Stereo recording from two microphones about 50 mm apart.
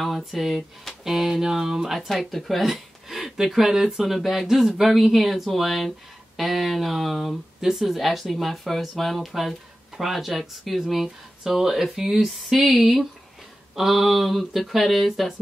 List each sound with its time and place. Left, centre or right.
0.0 s speech: centre
2.0 s speech: centre